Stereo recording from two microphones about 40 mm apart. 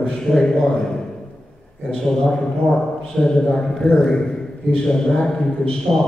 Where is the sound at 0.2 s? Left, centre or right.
Centre.